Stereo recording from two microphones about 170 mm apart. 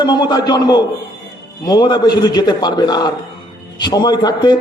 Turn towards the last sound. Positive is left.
turn(degrees=25)  # may be behind; listen again after turning